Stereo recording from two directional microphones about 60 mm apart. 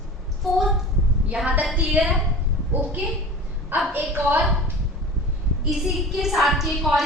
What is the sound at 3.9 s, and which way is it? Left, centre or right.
Speech, right.